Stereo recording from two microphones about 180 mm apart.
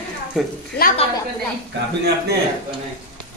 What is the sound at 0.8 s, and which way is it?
Speech, 55° left (ahead or behind).